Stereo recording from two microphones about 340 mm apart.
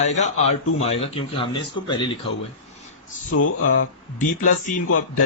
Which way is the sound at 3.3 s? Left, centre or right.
Left.